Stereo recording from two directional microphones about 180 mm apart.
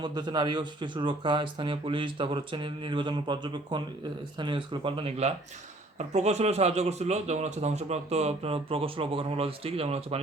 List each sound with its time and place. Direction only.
0.0 s a man's voice: 25° right (ahead or behind)